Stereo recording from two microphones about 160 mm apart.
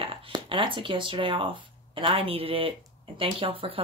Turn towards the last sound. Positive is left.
turn(degrees=-35)  # may be behind; listen again after turning